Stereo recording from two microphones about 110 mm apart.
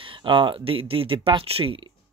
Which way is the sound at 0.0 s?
50° right (ahead or behind).